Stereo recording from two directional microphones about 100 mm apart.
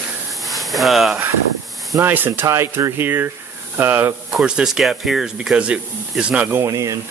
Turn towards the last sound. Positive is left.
turn(degrees=-30)  # may be behind; listen again after turning